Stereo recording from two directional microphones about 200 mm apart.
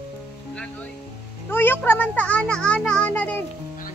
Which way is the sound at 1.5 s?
10° left (ahead or behind).